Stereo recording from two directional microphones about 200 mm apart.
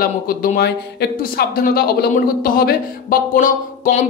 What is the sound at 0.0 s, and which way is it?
Speech, 45° left (ahead or behind).